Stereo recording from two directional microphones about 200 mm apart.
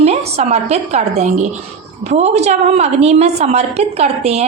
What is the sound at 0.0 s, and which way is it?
A woman's voice, 30° right (ahead or behind).